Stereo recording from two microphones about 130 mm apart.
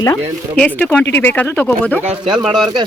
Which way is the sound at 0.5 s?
10° left (ahead or behind).